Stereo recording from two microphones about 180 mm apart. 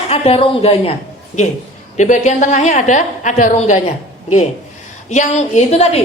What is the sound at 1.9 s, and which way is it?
A woman's voice, 40° left (ahead or behind).